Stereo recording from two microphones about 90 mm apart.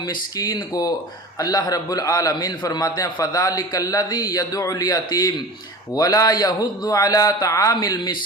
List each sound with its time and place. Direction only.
0.0 s a man's voice: 50° left (ahead or behind)
7.8 s a man's voice: 50° left (ahead or behind)